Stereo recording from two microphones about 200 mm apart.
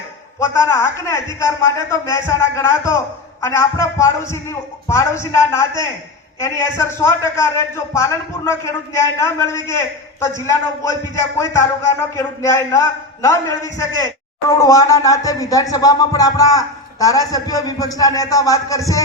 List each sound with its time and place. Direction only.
0.3 s speech: 15° left (ahead or behind)